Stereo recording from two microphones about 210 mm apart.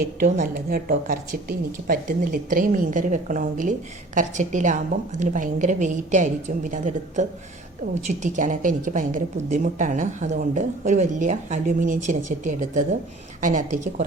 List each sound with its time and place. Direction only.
0.2 s a woman's voice: 35° right (ahead or behind)